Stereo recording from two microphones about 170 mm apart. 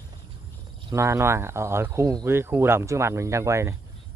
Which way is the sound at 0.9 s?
15° right (ahead or behind).